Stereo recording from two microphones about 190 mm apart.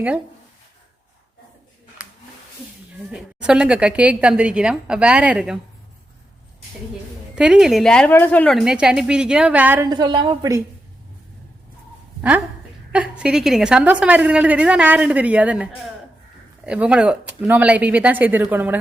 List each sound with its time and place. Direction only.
3.1 s a woman's voice: 5° right (ahead or behind)
7.3 s a woman's voice: 5° right (ahead or behind)
8.6 s a woman's voice: 5° right (ahead or behind)
9.8 s a woman's voice: 20° right (ahead or behind)
12.9 s a woman's voice: 5° right (ahead or behind)